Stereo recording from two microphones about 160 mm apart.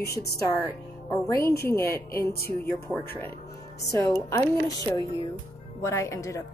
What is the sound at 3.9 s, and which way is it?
Speech, 20° left (ahead or behind).